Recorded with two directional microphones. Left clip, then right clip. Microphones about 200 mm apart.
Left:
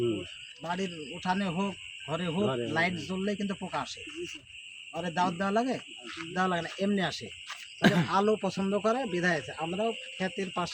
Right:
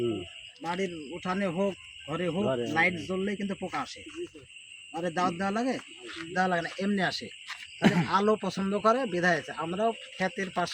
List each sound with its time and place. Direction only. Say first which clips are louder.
0.8 s speech: right 2 dB; 10° left (ahead or behind)
4.9 s speech: right 1 dB; 10° left (ahead or behind); by 10.7 s 10° right (ahead or behind)